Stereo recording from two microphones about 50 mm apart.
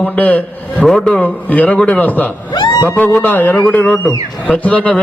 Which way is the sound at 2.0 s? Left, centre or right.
Left.